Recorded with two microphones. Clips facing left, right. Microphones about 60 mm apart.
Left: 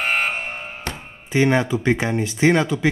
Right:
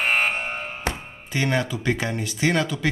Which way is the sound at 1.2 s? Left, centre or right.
Left.